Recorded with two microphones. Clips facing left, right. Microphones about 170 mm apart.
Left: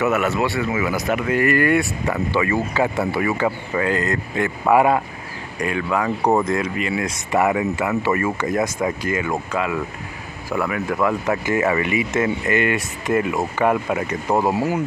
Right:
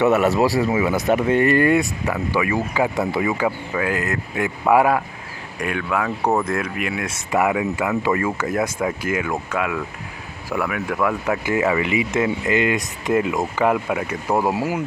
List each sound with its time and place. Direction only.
0.0 s speech: 35° right (ahead or behind)
2.3 s speech: 10° right (ahead or behind)
3.4 s speech: 5° right (ahead or behind)
11.2 s speech: 10° right (ahead or behind)